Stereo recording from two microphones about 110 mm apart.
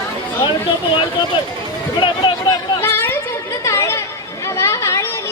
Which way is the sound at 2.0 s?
40° left (ahead or behind).